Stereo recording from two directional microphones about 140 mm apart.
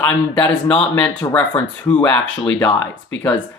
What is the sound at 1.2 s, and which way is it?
Speech, 25° left (ahead or behind).